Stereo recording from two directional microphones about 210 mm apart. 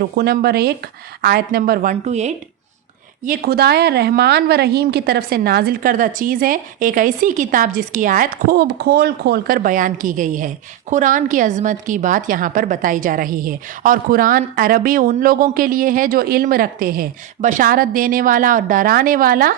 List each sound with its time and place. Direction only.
0.2 s a woman's voice: 50° right (ahead or behind)
3.2 s a woman's voice: 45° right (ahead or behind)